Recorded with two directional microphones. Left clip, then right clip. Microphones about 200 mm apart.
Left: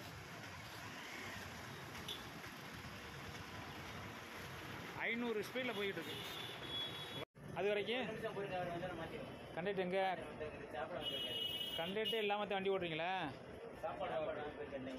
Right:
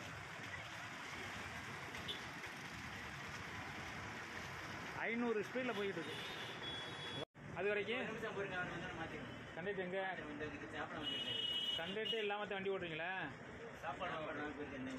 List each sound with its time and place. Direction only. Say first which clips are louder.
5.0 s speech: even; 20° right (ahead or behind)
7.5 s speech: left 1 dB; 10° left (ahead or behind)
9.7 s speech: left 4 dB; 25° left (ahead or behind)
11.8 s speech: left 2 dB; 20° left (ahead or behind)